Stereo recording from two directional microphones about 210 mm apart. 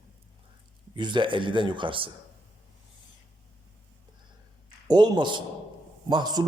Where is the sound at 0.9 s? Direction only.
20° right (ahead or behind).